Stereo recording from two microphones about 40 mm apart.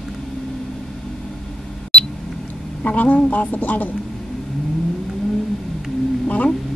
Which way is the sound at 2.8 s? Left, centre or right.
Left.